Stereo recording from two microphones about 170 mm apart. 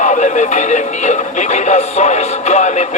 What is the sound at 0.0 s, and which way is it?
Speech, 45° left (ahead or behind).